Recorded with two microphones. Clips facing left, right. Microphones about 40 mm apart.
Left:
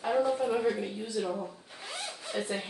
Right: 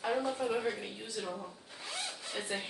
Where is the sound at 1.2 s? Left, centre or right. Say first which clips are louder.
Left 7 dB; left.